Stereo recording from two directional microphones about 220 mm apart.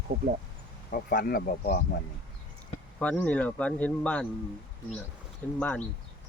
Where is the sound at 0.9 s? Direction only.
40° left (ahead or behind).